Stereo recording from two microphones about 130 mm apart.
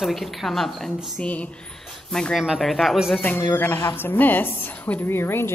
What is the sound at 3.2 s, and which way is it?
A woman's voice, 15° left (ahead or behind).